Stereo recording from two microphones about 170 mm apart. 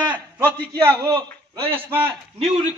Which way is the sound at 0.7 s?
20° right (ahead or behind).